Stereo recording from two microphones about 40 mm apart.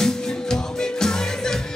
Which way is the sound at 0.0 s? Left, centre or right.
Centre.